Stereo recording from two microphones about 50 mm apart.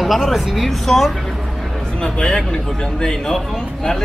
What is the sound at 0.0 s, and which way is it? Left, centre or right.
A woman's voice, centre.